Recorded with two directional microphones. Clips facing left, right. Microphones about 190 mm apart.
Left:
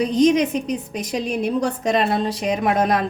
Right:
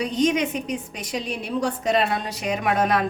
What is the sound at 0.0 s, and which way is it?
A woman's voice, 40° left (ahead or behind).